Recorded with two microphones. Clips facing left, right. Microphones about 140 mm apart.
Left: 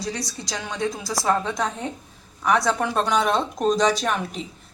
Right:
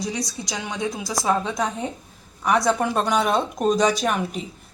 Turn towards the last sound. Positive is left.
turn(degrees=-5)  # may be behind; listen again after turning